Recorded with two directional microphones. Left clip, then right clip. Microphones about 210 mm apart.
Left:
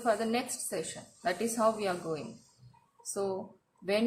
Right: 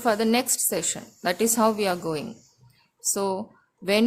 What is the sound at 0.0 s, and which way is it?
A woman's voice, 50° right (ahead or behind).